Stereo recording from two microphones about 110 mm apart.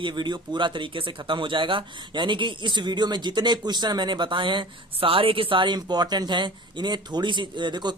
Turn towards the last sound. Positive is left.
turn(degrees=-40)  # may be behind; listen again after turning